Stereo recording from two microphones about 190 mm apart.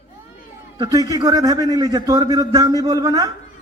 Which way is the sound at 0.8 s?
20° right (ahead or behind).